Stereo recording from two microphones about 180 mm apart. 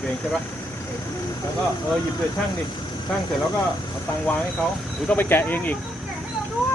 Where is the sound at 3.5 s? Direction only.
10° left (ahead or behind).